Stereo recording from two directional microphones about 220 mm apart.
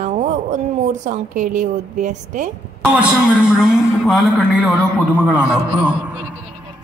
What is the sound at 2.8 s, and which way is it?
A woman's voice, 5° right (ahead or behind).